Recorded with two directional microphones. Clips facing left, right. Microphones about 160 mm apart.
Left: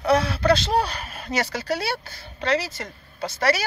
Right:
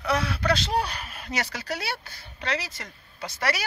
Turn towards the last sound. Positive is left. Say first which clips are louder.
# left 6 dB
turn(degrees=30)  # may be behind; listen again after turning